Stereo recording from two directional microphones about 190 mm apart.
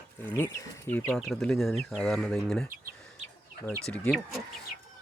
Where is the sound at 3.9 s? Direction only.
5° left (ahead or behind).